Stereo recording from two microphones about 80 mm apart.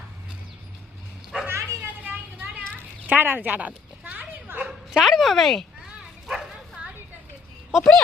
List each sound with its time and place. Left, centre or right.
1.5 s a sound: right
4.6 s speech: centre
5.8 s bow-wow: centre
7.7 s speech: centre